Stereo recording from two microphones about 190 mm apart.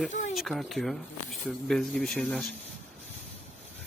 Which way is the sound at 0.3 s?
Centre (ahead or behind).